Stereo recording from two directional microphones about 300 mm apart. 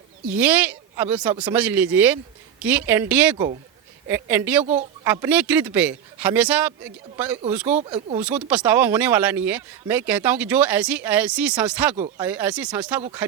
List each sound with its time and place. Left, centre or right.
0.3 s a woman's voice: centre
7.8 s speech: centre
8.4 s speech: centre
11.9 s speech: right
12.2 s speech: centre